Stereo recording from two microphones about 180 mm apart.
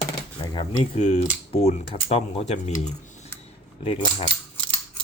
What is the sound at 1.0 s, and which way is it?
Speech, 35° left (ahead or behind).